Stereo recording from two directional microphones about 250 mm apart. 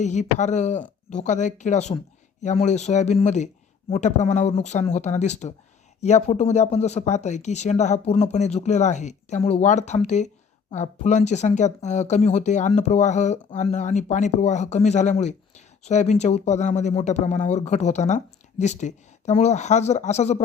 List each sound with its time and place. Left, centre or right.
0.0 s speech: left